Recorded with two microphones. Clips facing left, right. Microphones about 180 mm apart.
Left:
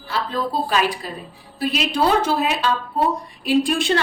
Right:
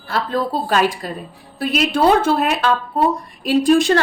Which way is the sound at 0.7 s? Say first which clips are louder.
Right 3 dB; 50° right (ahead or behind).